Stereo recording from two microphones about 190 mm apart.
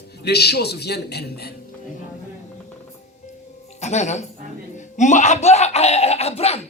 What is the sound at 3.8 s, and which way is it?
Speech, 35° left (ahead or behind).